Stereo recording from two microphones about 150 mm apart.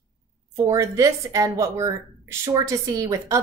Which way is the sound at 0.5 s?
20° right (ahead or behind).